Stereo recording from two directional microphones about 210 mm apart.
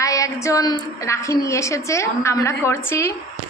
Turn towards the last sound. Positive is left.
turn(degrees=10)  # may be behind; listen again after turning